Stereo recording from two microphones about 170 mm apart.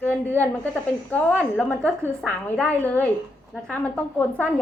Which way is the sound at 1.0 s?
10° left (ahead or behind).